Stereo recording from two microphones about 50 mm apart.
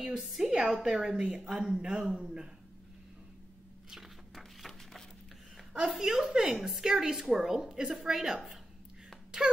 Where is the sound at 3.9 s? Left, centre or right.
Centre.